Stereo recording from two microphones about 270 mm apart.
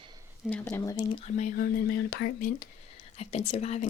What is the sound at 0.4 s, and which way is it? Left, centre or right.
Speech, centre.